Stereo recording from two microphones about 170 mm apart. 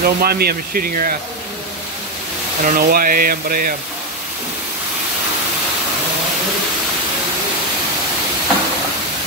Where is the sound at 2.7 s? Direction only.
60° right (ahead or behind).